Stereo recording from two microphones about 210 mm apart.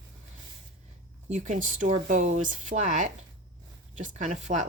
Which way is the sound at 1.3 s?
35° right (ahead or behind).